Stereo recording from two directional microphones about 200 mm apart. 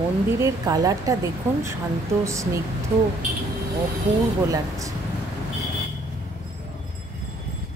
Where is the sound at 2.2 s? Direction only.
15° right (ahead or behind).